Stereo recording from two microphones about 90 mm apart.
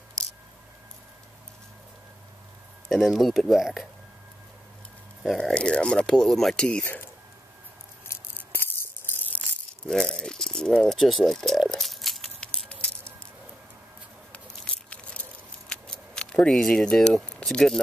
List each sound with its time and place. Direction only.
2.9 s speech: centre (ahead or behind)
5.2 s speech: 5° left (ahead or behind)
8.4 s music: 25° left (ahead or behind)
9.8 s speech: 10° left (ahead or behind)
11.7 s a sound: centre (ahead or behind)
14.3 s a sound: 15° left (ahead or behind)